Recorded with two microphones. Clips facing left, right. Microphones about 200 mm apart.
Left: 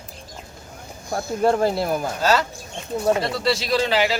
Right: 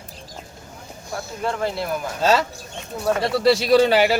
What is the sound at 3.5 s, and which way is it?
Speech, 60° right (ahead or behind).